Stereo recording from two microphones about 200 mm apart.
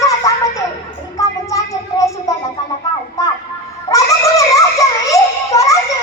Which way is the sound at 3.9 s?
15° left (ahead or behind).